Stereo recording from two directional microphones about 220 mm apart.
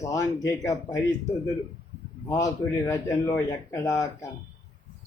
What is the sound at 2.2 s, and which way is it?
Speech, 15° left (ahead or behind).